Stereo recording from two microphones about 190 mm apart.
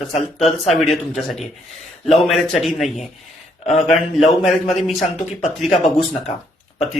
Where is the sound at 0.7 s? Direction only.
Centre (ahead or behind).